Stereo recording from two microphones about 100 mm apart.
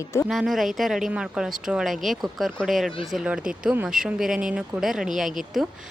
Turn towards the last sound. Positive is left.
turn(degrees=-5)  # may be behind; listen again after turning